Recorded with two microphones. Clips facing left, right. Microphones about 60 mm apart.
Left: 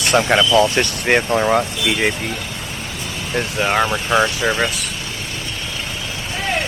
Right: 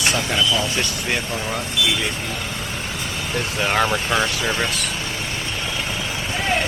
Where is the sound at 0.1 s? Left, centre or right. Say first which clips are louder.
Left 9 dB; left.